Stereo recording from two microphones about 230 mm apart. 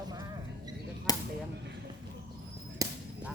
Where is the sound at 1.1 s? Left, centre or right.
Centre.